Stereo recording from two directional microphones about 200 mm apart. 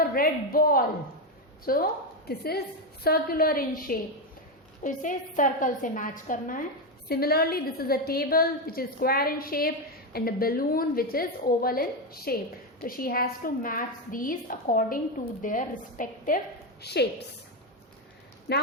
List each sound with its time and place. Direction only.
0.0 s a woman's voice: 45° left (ahead or behind)
16.8 s a woman's voice: 55° left (ahead or behind)
18.5 s a woman's voice: 55° left (ahead or behind)